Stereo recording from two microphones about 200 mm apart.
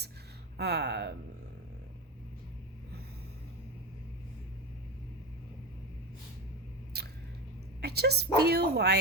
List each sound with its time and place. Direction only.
0.5 s speech: 55° right (ahead or behind)
6.9 s a sound: 55° right (ahead or behind)
7.8 s speech: 55° right (ahead or behind)